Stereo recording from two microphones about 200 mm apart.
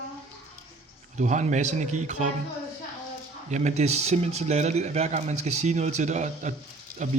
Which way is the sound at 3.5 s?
35° right (ahead or behind).